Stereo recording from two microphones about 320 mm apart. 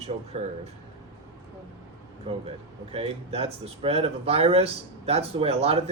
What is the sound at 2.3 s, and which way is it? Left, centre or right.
Speech, centre.